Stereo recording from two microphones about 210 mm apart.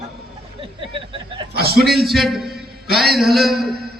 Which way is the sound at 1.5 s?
50° right (ahead or behind).